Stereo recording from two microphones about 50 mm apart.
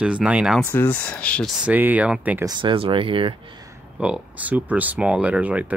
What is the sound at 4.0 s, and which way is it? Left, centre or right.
Speech, right.